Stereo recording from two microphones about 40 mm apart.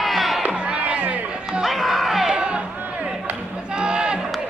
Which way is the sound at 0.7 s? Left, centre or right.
Right.